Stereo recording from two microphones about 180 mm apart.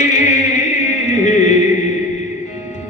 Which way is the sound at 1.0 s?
40° left (ahead or behind).